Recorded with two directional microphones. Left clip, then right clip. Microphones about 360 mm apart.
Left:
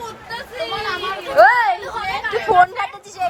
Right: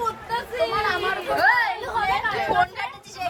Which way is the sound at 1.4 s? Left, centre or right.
Centre.